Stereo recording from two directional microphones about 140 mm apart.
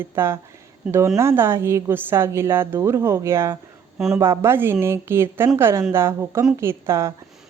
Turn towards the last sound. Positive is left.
turn(degrees=-20)  # may be behind; listen again after turning